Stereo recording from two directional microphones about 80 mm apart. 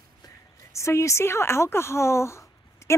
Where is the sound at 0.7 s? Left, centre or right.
Left.